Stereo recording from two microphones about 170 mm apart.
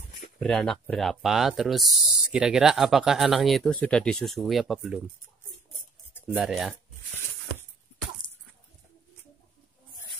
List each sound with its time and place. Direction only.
0.4 s speech: 5° left (ahead or behind)
6.3 s speech: centre (ahead or behind)
8.2 s a sound: 30° left (ahead or behind)